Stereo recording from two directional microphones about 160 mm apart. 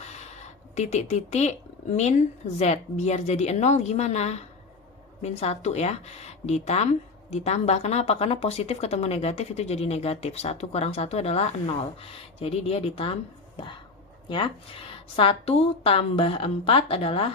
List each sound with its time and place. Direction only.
0.0 s speech: 45° left (ahead or behind)